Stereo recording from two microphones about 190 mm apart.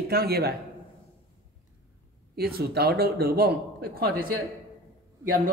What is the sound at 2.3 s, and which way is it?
A man's voice, 55° right (ahead or behind).